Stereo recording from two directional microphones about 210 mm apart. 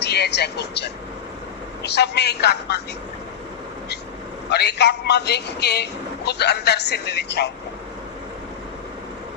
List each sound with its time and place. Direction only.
0.0 s a man's voice: 55° left (ahead or behind)
4.4 s a man's voice: 55° left (ahead or behind)